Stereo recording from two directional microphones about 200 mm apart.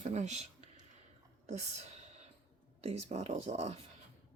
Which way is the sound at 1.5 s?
35° right (ahead or behind).